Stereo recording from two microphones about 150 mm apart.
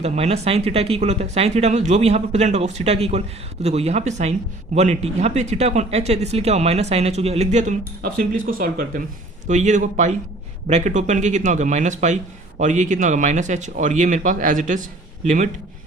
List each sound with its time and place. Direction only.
0.0 s speech: 45° right (ahead or behind)
8.0 s speech: 70° right (ahead or behind)
9.5 s speech: 55° right (ahead or behind)